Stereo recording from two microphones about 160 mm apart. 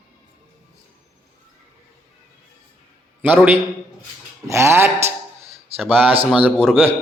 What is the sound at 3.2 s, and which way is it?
Speech, 10° right (ahead or behind).